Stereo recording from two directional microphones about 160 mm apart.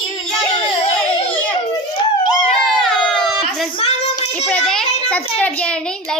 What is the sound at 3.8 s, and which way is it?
Child singing, 40° left (ahead or behind).